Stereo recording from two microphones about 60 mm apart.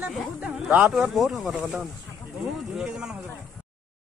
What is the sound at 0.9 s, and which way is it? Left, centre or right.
Speech, centre.